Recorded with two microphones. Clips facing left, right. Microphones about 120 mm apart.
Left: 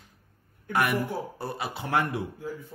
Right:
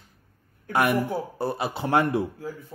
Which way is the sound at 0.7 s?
30° right (ahead or behind).